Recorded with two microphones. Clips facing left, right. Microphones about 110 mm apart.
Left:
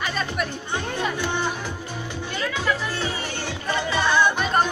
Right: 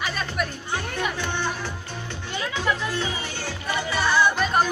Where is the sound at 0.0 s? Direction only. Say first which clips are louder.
Left 1 dB; centre (ahead or behind).